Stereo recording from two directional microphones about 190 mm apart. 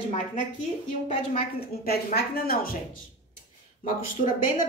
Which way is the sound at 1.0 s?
50° left (ahead or behind).